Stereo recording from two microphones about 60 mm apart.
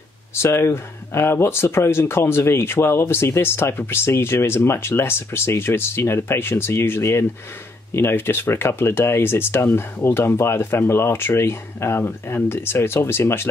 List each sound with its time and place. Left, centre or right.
0.3 s speech: left